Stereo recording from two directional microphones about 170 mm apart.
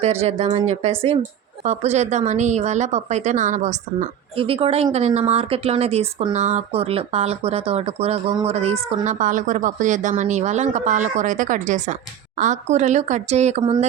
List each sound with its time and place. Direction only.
0.0 s speech: 35° right (ahead or behind)